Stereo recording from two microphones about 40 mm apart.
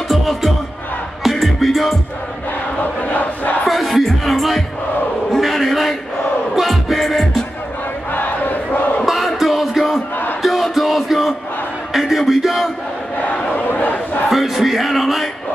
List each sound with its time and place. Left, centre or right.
0.1 s music: centre
2.8 s crowd: left
3.6 s music: centre
5.3 s a sound: centre
6.5 s music: centre
8.1 s battle cry: left
9.0 s music: centre
11.9 s crowd: centre
13.2 s battle cry: left
14.3 s a sound: centre